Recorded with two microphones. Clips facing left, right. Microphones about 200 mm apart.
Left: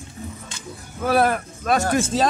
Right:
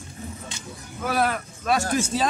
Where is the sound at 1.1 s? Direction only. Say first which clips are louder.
Left 5 dB; 45° left (ahead or behind).